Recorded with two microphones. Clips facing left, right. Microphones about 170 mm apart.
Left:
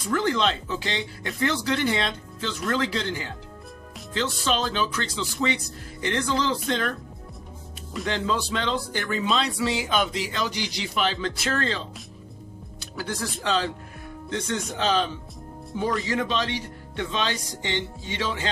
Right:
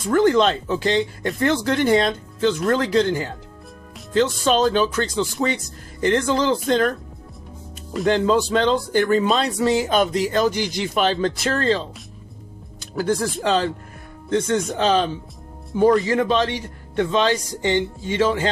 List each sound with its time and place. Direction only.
0.1 s speech: 45° right (ahead or behind)
12.9 s speech: 50° right (ahead or behind)
14.7 s speech: 45° right (ahead or behind)